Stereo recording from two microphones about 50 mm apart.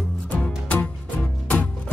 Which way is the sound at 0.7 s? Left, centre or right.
Left.